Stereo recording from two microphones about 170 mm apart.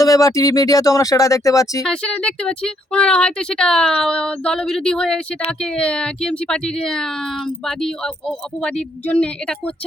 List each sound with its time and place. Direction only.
0.0 s speech: 20° left (ahead or behind)
1.8 s speech: 5° left (ahead or behind)